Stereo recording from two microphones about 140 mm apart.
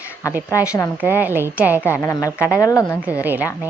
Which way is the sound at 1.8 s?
20° left (ahead or behind).